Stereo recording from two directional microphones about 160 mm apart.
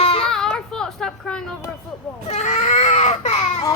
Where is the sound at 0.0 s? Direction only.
35° left (ahead or behind).